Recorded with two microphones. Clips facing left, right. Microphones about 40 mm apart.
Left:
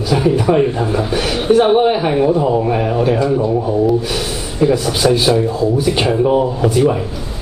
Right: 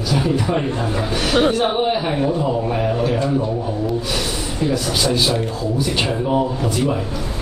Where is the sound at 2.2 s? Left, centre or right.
Left.